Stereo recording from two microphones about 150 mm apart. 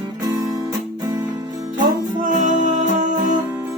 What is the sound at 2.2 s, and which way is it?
Music, 55° right (ahead or behind).